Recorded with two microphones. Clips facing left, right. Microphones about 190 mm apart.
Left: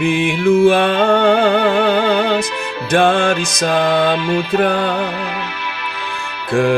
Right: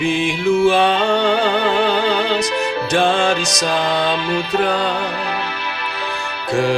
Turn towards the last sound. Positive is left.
turn(degrees=55)  # may be behind; listen again after turning